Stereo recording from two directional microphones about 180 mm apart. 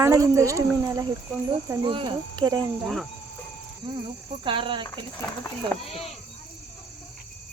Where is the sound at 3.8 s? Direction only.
30° right (ahead or behind).